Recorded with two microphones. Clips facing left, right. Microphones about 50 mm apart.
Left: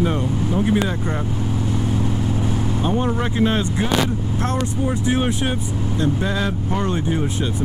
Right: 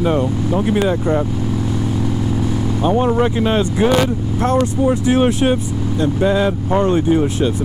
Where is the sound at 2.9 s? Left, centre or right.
Right.